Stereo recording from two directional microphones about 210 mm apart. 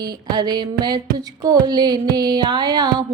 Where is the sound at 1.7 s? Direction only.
20° right (ahead or behind).